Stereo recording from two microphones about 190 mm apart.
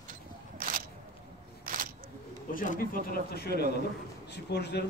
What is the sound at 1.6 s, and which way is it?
Single-lens reflex camera, 45° right (ahead or behind).